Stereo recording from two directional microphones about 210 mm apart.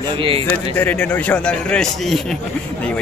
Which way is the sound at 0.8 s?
10° left (ahead or behind).